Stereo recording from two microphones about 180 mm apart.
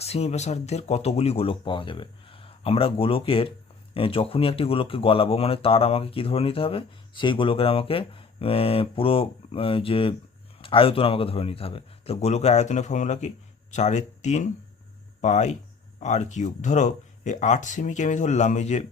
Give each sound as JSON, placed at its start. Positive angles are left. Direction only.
{"t": 0.0, "sound": "speech", "side_deg": 35}